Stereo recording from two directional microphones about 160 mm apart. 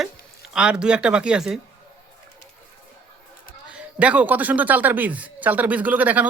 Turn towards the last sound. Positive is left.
turn(degrees=-10)  # may be behind; listen again after turning